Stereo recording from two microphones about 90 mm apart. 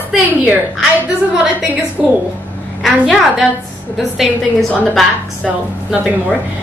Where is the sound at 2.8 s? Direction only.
Centre (ahead or behind).